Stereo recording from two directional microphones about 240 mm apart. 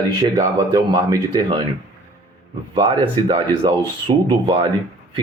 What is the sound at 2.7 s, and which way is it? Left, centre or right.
Speech, right.